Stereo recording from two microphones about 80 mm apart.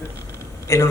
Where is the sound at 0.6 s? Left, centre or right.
Left.